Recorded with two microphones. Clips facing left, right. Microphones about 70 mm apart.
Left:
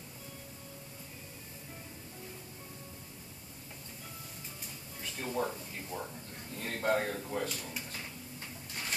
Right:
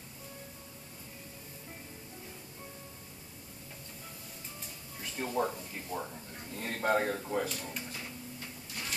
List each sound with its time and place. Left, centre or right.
5.2 s a man's voice: centre
7.4 s speech: centre